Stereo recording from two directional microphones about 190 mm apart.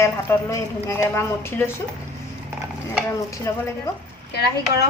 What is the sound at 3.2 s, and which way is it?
Speech, 15° left (ahead or behind).